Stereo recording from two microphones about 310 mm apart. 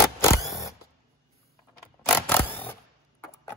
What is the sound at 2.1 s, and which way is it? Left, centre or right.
Creak, centre.